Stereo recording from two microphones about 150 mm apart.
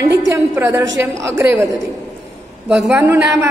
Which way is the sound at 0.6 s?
15° right (ahead or behind).